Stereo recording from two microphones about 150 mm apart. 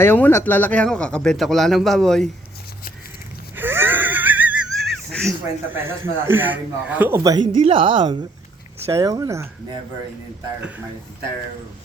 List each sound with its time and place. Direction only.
0.0 s speech: 15° left (ahead or behind)
3.5 s wheeze: 15° right (ahead or behind)
4.8 s a sound: 5° left (ahead or behind)
5.7 s a man's voice: 15° right (ahead or behind)
7.2 s a woman's voice: 30° right (ahead or behind)
8.9 s speech: 25° right (ahead or behind)